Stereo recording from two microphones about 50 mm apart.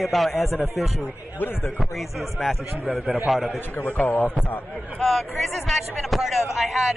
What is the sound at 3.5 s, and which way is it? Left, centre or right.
Speech, left.